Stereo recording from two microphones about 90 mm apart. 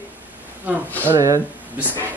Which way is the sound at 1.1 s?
35° right (ahead or behind).